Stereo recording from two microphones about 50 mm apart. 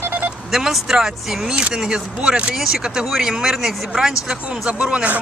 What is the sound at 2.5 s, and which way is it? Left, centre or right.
Speech, centre.